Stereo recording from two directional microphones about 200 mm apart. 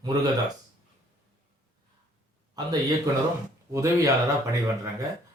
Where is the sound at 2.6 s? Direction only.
20° right (ahead or behind).